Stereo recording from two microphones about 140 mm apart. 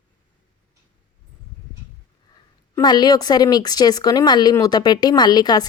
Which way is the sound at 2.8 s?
30° left (ahead or behind).